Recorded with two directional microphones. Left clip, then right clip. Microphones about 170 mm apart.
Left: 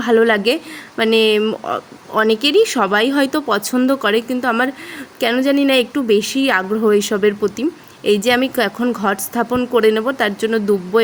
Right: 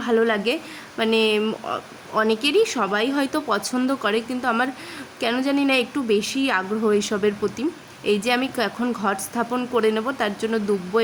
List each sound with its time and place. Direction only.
0.0 s speech: 35° left (ahead or behind)